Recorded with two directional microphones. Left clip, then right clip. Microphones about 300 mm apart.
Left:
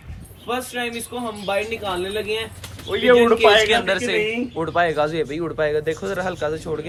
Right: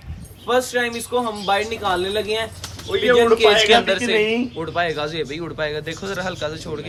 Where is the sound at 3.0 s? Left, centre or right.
Left.